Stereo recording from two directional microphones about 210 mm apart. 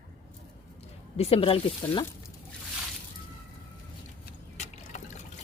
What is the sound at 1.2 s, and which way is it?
Speech, 30° left (ahead or behind).